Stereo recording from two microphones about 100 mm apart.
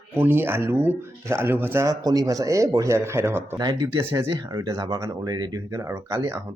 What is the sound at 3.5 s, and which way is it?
Speech, 40° right (ahead or behind).